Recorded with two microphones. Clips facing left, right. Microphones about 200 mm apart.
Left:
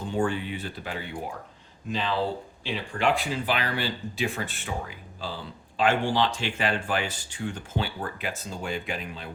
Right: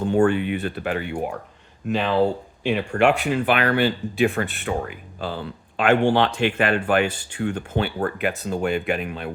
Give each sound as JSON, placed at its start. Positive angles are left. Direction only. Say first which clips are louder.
{"t": 0.0, "sound": "speech", "louder": "right 9 dB", "side_deg": -60}